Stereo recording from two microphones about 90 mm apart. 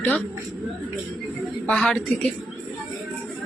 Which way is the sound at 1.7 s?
10° left (ahead or behind).